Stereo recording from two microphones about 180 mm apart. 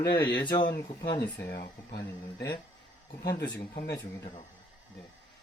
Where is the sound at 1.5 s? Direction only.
55° left (ahead or behind).